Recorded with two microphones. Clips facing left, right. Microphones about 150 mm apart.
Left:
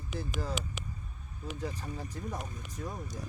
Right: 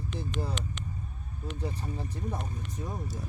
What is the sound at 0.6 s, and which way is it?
Speech, 5° left (ahead or behind).